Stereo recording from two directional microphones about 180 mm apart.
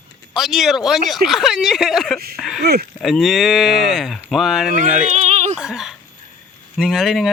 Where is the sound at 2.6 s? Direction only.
65° right (ahead or behind).